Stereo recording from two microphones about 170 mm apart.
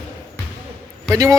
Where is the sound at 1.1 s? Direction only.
20° right (ahead or behind).